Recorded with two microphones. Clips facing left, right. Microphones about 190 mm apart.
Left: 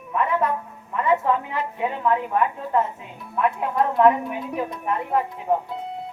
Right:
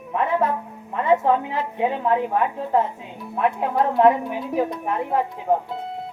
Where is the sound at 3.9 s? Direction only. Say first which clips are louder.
Right 1 dB; 30° right (ahead or behind).